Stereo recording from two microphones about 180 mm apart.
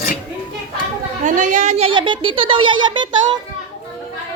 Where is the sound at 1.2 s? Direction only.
45° right (ahead or behind); by 3.2 s 25° right (ahead or behind).